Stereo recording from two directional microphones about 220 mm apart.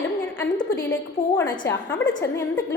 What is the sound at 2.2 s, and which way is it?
Speech, 10° left (ahead or behind).